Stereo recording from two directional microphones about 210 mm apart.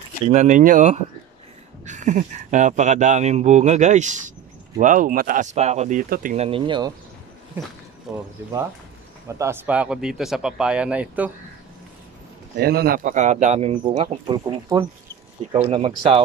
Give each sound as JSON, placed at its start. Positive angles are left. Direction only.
{"t": 0.3, "sound": "speech", "side_deg": -35}
{"t": 6.3, "sound": "speech", "side_deg": -30}
{"t": 8.1, "sound": "speech", "side_deg": 0}
{"t": 9.4, "sound": "speech", "side_deg": -10}
{"t": 12.5, "sound": "speech", "side_deg": -50}